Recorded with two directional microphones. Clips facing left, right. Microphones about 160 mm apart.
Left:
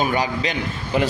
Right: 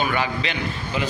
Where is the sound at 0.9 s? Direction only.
60° left (ahead or behind).